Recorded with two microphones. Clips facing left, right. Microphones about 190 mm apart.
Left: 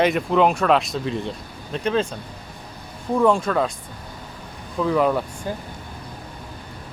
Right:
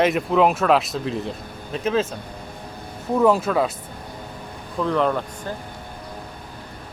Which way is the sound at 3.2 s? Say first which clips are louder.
Right 1 dB; 5° right (ahead or behind).